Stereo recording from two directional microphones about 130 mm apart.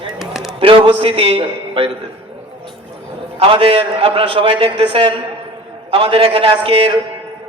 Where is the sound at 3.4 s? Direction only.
45° right (ahead or behind).